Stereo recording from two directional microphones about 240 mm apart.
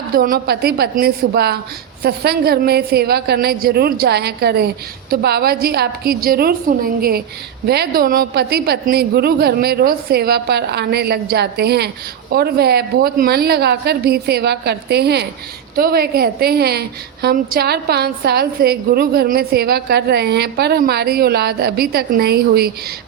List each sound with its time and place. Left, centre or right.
0.1 s a woman's voice: right